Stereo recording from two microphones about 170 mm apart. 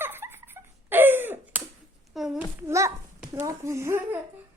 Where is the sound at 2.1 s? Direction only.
Centre (ahead or behind).